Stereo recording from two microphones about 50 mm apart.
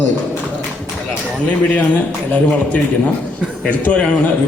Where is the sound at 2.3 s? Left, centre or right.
Left.